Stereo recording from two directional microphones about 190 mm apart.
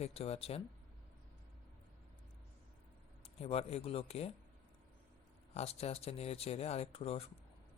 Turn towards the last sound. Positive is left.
turn(degrees=30)  # may be behind; listen again after turning